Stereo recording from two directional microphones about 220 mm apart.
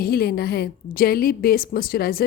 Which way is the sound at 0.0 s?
45° left (ahead or behind).